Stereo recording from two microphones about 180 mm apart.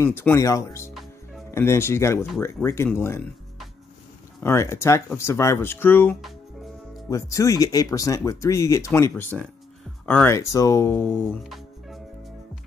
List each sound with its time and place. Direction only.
0.0 s speech: 15° left (ahead or behind)
4.4 s speech: 15° left (ahead or behind)
11.4 s music: centre (ahead or behind)